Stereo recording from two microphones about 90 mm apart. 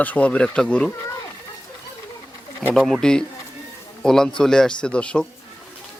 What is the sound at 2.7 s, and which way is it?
Speech, 5° left (ahead or behind).